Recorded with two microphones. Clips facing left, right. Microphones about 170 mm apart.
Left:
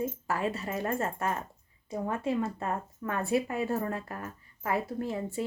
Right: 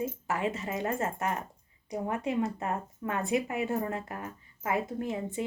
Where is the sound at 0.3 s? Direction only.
20° right (ahead or behind).